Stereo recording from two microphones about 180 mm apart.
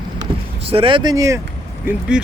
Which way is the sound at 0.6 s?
30° right (ahead or behind).